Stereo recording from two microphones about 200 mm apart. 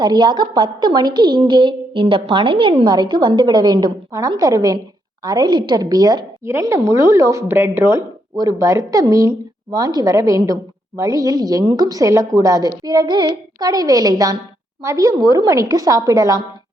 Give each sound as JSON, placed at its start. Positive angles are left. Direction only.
{"t": 0.0, "sound": "a woman's voice", "side_deg": -20}